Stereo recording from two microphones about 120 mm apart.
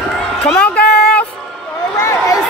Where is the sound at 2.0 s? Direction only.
25° left (ahead or behind).